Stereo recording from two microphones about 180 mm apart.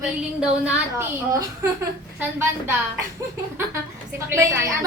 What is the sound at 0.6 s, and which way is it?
Speech, 15° right (ahead or behind).